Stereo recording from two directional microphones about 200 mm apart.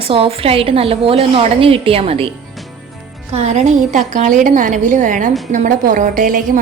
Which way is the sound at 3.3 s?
35° right (ahead or behind).